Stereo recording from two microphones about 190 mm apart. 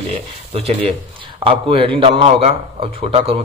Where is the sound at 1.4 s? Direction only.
30° right (ahead or behind).